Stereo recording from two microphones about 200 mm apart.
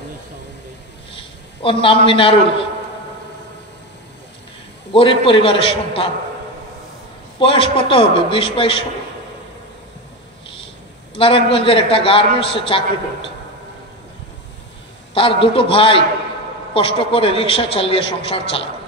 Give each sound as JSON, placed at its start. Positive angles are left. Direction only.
{"t": 1.1, "sound": "a sound", "side_deg": 25}
{"t": 4.9, "sound": "a man's voice", "side_deg": 25}
{"t": 7.3, "sound": "a man's voice", "side_deg": 25}
{"t": 11.1, "sound": "a man's voice", "side_deg": 25}
{"t": 15.1, "sound": "a man's voice", "side_deg": 25}